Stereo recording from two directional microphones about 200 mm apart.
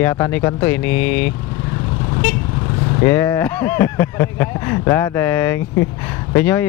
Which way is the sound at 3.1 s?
10° left (ahead or behind).